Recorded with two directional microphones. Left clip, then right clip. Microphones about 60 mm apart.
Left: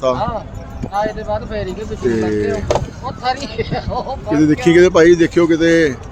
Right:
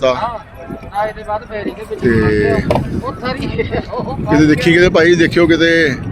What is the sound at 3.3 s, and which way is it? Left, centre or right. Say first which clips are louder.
Speech: right 3 dB; left.